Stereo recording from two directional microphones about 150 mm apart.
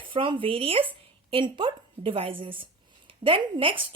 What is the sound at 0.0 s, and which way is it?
A woman's voice, 35° right (ahead or behind).